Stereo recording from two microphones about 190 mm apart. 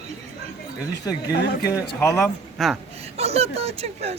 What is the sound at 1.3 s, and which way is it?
Speech, 60° left (ahead or behind).